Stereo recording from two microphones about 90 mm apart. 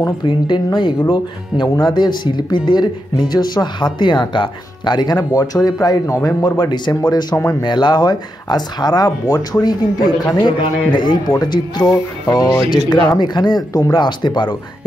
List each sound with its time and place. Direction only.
0.2 s speech: 55° left (ahead or behind)